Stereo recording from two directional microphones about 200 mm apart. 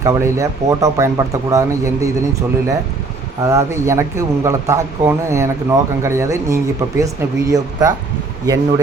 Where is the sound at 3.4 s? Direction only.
15° right (ahead or behind).